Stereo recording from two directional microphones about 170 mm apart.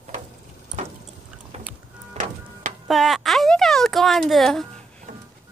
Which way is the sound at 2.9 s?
Centre (ahead or behind).